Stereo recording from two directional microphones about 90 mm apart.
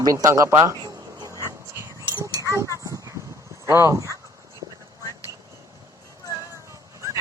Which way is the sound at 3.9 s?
35° right (ahead or behind).